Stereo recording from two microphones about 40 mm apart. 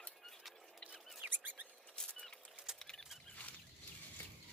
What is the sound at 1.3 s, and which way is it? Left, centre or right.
Rodents, right.